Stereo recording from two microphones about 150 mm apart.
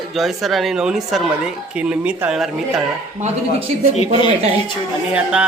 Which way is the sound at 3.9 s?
40° left (ahead or behind).